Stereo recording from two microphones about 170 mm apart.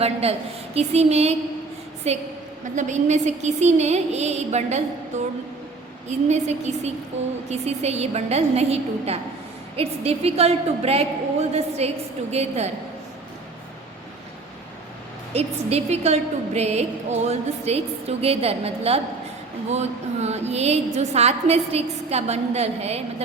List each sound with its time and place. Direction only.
0.0 s a woman's voice: 35° right (ahead or behind)
15.3 s a woman's voice: 35° right (ahead or behind)